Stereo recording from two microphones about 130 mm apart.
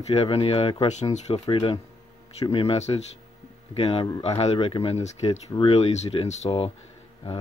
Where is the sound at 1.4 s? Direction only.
30° left (ahead or behind).